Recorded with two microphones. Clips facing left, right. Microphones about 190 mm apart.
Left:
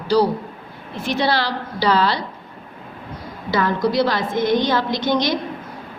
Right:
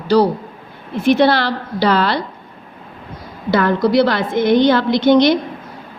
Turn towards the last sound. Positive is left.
turn(degrees=-65)  # may be behind; listen again after turning